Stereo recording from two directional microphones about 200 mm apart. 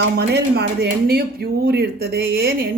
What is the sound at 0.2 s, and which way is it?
Speech, 55° right (ahead or behind).